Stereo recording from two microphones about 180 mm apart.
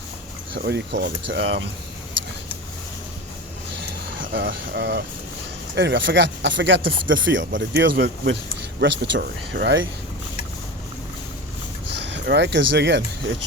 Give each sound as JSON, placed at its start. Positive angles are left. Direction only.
{"t": 0.5, "sound": "speech", "side_deg": -70}
{"t": 4.3, "sound": "speech", "side_deg": -75}
{"t": 7.8, "sound": "speech", "side_deg": -70}
{"t": 12.0, "sound": "speech", "side_deg": -75}